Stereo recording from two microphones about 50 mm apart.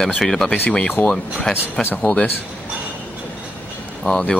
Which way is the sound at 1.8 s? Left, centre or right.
Left.